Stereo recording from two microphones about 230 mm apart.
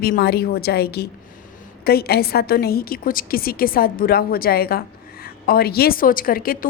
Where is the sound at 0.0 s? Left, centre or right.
Left.